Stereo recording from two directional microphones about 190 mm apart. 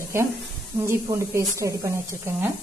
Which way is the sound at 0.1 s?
15° right (ahead or behind).